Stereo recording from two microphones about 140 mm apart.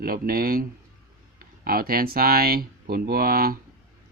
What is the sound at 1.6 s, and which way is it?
Speech, 90° right.